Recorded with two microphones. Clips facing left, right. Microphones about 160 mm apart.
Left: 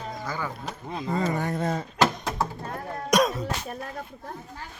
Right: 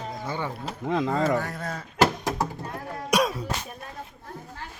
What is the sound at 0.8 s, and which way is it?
Speech, 90° right.